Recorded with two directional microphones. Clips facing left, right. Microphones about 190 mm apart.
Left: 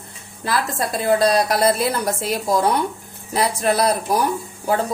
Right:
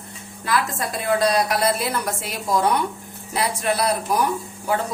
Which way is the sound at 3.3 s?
40° left (ahead or behind).